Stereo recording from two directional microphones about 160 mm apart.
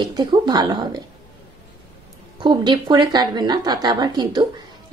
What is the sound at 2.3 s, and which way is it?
A woman's voice, 30° right (ahead or behind).